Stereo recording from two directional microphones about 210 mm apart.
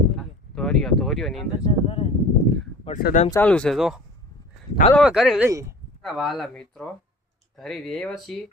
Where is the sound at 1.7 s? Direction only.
25° left (ahead or behind).